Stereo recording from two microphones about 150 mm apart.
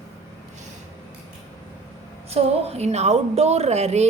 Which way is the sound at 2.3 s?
45° right (ahead or behind).